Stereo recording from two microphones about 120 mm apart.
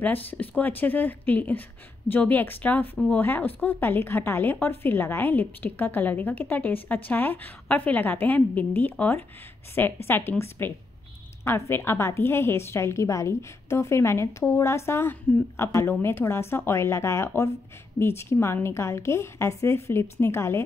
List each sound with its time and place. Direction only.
0.0 s a woman's voice: 15° left (ahead or behind)